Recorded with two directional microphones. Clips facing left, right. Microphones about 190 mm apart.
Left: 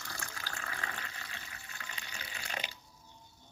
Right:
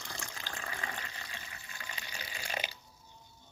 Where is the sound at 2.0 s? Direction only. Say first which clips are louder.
Right 3 dB; 10° right (ahead or behind).